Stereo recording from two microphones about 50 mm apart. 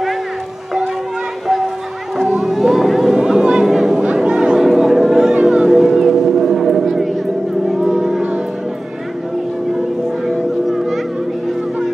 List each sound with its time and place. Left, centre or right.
2.2 s a sound: centre
4.6 s music: centre
7.6 s vehicle: centre
9.7 s music: centre